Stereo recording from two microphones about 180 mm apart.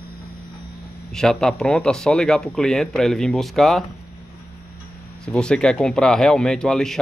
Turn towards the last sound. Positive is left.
turn(degrees=5)  # may be behind; listen again after turning